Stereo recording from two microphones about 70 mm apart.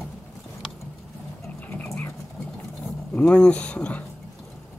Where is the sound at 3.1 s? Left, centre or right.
Centre.